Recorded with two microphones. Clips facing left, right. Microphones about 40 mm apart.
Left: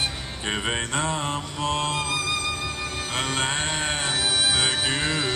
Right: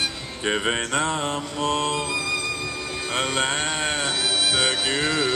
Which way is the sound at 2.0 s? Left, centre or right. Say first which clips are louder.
Even; left.